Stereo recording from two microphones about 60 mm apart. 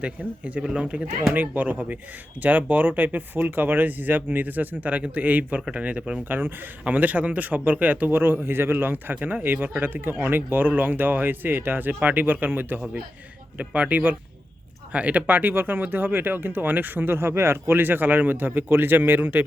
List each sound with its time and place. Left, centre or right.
0.0 s speech: centre
6.2 s speech: right